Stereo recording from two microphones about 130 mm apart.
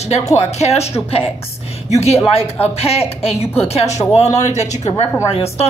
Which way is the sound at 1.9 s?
55° left (ahead or behind).